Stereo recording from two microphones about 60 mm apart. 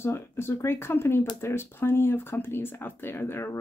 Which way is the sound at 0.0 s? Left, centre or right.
Left.